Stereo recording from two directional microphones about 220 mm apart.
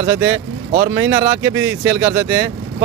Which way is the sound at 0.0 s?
10° right (ahead or behind).